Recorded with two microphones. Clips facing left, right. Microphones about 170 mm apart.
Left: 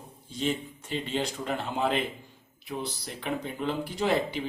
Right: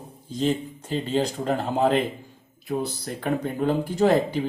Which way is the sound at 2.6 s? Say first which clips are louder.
Right 7 dB; 50° right (ahead or behind).